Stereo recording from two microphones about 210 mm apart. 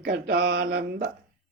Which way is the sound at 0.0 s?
50° right (ahead or behind).